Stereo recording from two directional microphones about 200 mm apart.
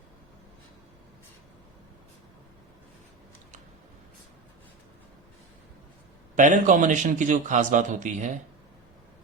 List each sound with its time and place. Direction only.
6.3 s a man's voice: 40° right (ahead or behind)